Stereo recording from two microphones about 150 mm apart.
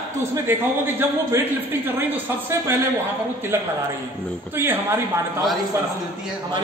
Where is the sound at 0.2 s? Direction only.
15° right (ahead or behind).